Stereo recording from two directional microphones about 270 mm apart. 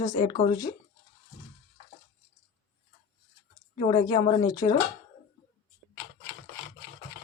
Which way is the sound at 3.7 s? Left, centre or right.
Centre.